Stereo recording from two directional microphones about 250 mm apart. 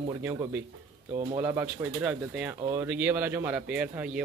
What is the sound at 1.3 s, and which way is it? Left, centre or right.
Speech, centre.